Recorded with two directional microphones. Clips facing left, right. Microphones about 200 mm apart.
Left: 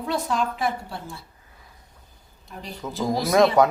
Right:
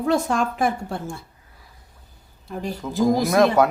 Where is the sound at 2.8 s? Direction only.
5° left (ahead or behind).